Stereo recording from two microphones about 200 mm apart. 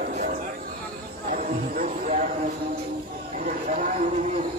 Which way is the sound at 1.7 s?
40° right (ahead or behind).